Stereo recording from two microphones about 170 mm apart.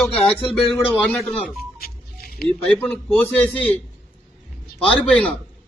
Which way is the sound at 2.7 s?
10° left (ahead or behind).